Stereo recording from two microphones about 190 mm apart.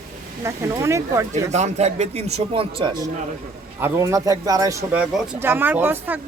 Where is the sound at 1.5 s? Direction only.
35° right (ahead or behind).